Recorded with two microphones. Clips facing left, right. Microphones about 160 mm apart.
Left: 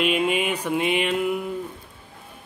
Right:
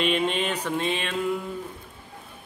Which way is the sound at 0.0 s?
5° left (ahead or behind).